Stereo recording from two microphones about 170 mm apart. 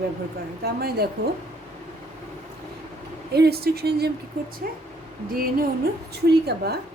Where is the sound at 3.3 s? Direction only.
70° right (ahead or behind).